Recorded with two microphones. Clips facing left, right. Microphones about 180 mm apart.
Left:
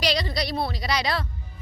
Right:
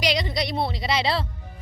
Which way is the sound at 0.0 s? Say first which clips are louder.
Right 1 dB; 20° right (ahead or behind).